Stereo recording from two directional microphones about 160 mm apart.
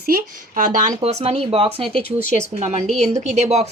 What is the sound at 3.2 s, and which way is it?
Speech, 45° right (ahead or behind).